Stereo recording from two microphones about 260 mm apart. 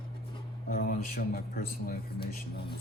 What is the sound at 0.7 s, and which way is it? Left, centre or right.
A man's voice, left.